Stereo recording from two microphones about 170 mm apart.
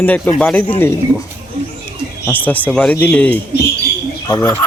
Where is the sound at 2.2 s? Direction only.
10° left (ahead or behind).